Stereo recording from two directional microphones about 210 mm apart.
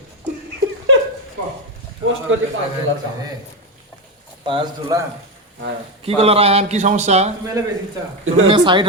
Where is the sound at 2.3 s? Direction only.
65° right (ahead or behind).